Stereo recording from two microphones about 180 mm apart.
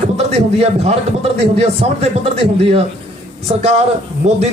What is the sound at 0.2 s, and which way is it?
A man's voice, 40° right (ahead or behind).